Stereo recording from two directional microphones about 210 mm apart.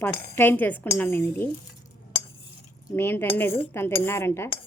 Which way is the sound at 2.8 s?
10° left (ahead or behind).